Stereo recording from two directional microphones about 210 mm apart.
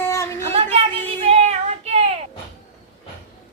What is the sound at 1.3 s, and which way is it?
Child singing, 30° right (ahead or behind).